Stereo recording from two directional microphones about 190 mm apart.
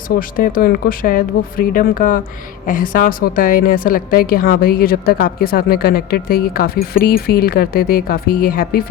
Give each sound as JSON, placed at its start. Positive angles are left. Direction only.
{"t": 0.2, "sound": "a woman's voice", "side_deg": 45}